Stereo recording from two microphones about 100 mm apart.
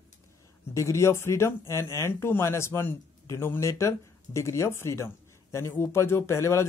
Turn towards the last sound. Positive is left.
turn(degrees=30)  # may be behind; listen again after turning